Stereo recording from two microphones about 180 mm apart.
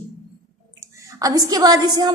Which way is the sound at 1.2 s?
20° right (ahead or behind).